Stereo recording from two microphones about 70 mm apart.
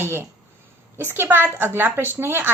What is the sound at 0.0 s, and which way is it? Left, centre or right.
A woman's voice, right.